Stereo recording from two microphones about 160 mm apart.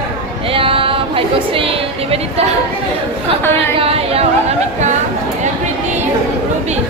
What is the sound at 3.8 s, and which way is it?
A woman's voice, 40° right (ahead or behind).